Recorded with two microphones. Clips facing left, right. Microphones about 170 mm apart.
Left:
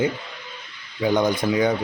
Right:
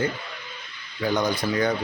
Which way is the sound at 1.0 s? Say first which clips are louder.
Left 4 dB; 25° left (ahead or behind).